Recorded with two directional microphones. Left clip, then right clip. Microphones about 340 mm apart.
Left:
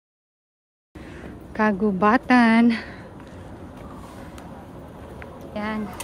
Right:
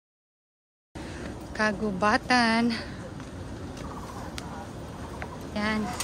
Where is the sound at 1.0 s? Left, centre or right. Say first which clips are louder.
Right 1 dB; centre.